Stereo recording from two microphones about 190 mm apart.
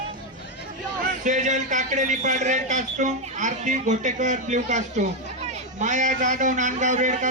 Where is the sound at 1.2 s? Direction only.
40° right (ahead or behind).